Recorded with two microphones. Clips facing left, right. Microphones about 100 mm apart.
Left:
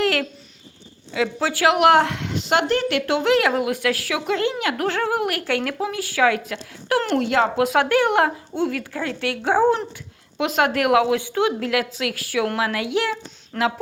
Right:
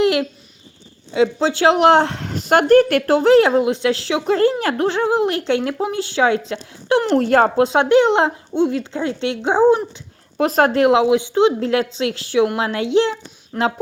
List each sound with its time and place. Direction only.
0.0 s a sound: 20° right (ahead or behind)
1.1 s speech: 25° right (ahead or behind)
4.4 s speech: 40° right (ahead or behind)
4.9 s a woman's voice: 20° right (ahead or behind)
7.2 s speech: 45° right (ahead or behind)
7.6 s a woman's voice: 25° right (ahead or behind)
10.3 s a woman's voice: 40° right (ahead or behind)